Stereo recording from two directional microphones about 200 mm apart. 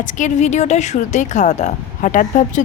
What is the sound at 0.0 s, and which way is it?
A woman's voice, 40° left (ahead or behind).